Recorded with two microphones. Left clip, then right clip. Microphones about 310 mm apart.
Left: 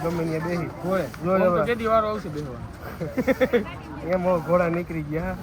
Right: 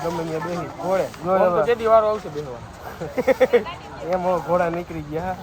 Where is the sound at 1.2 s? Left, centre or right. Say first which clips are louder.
Right 2 dB; centre.